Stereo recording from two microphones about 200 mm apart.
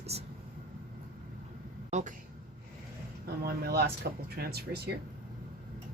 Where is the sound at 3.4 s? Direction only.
50° right (ahead or behind).